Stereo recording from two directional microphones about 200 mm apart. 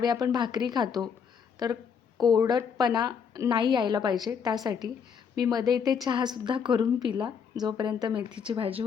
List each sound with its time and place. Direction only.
0.0 s a woman's voice: 20° right (ahead or behind)